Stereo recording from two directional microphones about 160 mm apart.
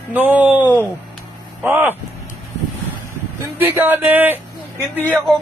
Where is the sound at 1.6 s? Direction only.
10° right (ahead or behind).